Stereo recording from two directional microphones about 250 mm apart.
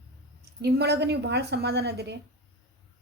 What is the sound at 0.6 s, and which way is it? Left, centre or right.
A woman's voice, right.